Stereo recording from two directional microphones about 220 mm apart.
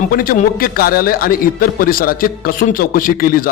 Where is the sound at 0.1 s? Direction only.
40° left (ahead or behind).